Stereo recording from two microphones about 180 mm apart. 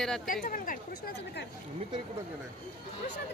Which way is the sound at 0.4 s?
50° left (ahead or behind).